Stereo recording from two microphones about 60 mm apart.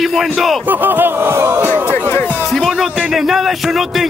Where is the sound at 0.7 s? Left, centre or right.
Right.